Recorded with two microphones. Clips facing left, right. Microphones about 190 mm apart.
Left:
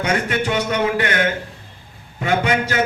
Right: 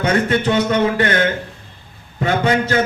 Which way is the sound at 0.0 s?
30° right (ahead or behind).